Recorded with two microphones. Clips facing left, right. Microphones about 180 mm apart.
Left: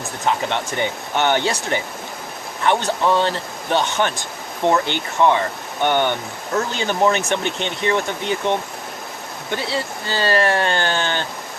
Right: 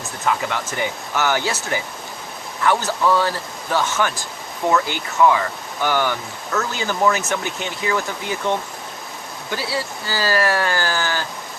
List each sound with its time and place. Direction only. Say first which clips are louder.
0.3 s speech: left 1 dB; 25° left (ahead or behind)